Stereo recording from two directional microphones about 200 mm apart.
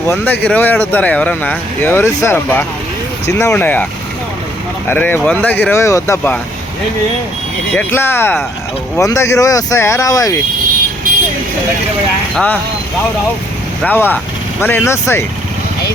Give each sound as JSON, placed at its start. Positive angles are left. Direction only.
{"t": 0.1, "sound": "speech", "side_deg": 10}
{"t": 4.9, "sound": "speech", "side_deg": 10}
{"t": 7.7, "sound": "speech", "side_deg": 10}
{"t": 12.3, "sound": "speech", "side_deg": 5}
{"t": 13.8, "sound": "speech", "side_deg": 10}